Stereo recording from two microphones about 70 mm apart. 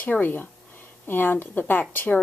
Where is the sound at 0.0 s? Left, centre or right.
Left.